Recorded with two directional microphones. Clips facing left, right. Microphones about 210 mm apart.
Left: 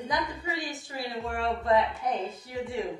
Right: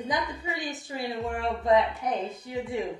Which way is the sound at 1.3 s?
20° right (ahead or behind).